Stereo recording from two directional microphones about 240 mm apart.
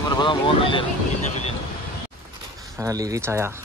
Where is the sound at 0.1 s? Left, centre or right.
Centre.